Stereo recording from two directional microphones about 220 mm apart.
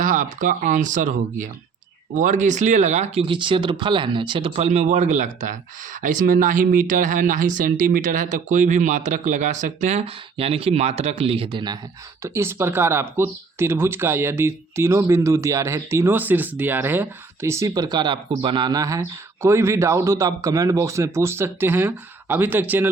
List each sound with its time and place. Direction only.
0.0 s speech: 35° right (ahead or behind); by 22.9 s 10° right (ahead or behind)